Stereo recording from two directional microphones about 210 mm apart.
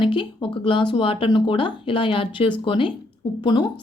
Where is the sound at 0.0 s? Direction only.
25° left (ahead or behind).